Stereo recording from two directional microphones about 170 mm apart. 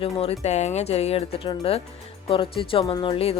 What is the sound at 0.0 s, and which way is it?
A woman's voice, 35° left (ahead or behind).